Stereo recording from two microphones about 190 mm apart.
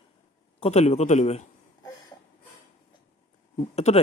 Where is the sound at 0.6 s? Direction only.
35° left (ahead or behind).